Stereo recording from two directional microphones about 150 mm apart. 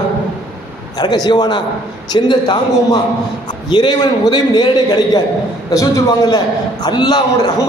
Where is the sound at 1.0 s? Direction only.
25° left (ahead or behind).